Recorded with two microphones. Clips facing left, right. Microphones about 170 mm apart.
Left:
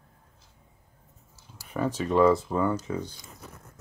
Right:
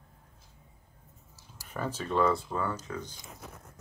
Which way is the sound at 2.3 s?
20° left (ahead or behind).